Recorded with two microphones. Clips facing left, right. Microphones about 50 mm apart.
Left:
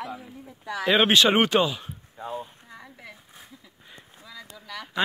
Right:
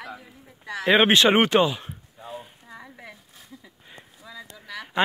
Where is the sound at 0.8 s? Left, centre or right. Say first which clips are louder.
Right 2 dB; right.